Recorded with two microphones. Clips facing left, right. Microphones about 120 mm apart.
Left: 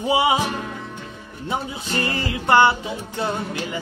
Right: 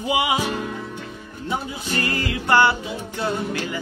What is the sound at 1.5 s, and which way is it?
Music, 20° left (ahead or behind).